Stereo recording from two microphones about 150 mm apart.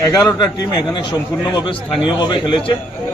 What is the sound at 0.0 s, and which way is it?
Speech, 20° left (ahead or behind).